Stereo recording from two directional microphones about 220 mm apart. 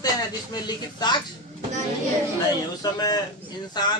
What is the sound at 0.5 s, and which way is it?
Speech, 20° left (ahead or behind).